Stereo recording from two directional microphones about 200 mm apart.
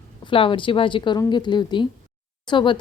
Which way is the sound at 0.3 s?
25° left (ahead or behind).